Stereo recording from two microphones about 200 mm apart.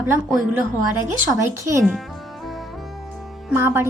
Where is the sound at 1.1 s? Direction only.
15° right (ahead or behind).